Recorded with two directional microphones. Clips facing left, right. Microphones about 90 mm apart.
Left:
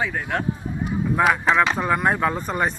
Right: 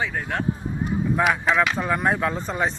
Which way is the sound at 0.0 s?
5° left (ahead or behind).